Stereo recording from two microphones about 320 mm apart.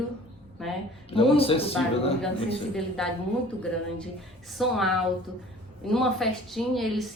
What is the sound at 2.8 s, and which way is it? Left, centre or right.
Speech, centre.